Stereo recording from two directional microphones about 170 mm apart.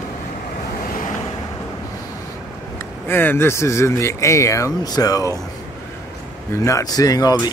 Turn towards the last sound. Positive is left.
turn(degrees=20)  # may be behind; listen again after turning